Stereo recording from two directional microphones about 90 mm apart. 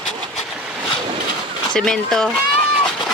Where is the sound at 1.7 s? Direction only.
5° left (ahead or behind).